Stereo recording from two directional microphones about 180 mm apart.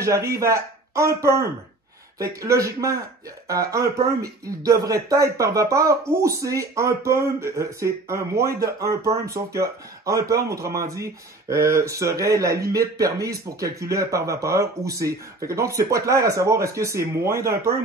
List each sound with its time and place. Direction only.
0.0 s speech: 15° right (ahead or behind)